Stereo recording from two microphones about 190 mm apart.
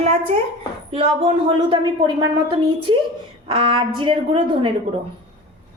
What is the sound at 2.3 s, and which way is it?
Speech, 25° right (ahead or behind).